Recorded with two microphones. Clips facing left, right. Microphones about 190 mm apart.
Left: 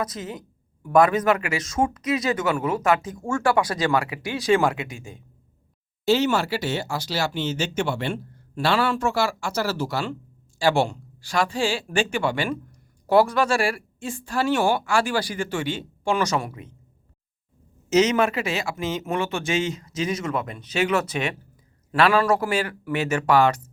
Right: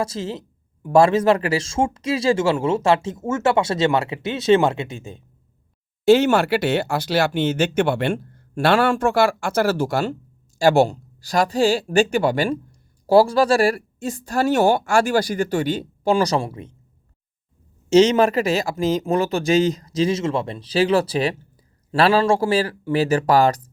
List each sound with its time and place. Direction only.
0.0 s speech: 30° right (ahead or behind)
6.1 s speech: 50° right (ahead or behind); by 16.6 s 30° right (ahead or behind)
17.8 s speech: 30° right (ahead or behind)